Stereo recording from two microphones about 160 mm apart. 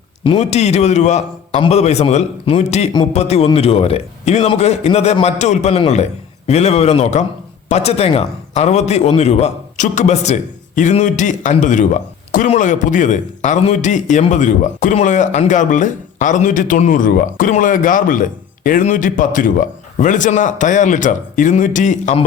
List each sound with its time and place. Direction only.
0.3 s a man's voice: 40° left (ahead or behind)